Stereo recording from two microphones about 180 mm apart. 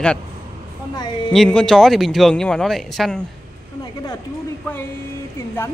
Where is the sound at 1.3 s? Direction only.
5° left (ahead or behind).